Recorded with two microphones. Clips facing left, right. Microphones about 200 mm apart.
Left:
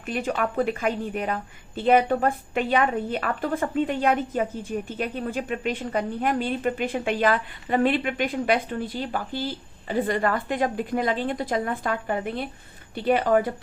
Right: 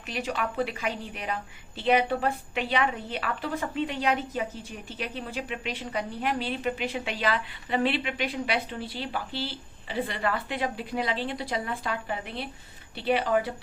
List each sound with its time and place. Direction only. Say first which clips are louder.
0.1 s a woman's voice: left 5 dB; 50° left (ahead or behind)